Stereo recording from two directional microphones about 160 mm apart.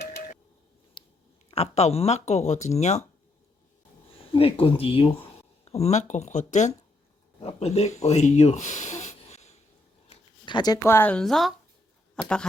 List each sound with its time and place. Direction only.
1.0 s a sound: 30° left (ahead or behind)
1.5 s speech: 40° left (ahead or behind)
4.4 s speech: 35° left (ahead or behind)
10.4 s speech: 25° left (ahead or behind)
10.8 s a woman's voice: 15° left (ahead or behind)